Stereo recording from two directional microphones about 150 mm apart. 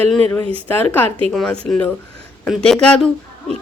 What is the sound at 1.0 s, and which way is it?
Speech, 40° right (ahead or behind).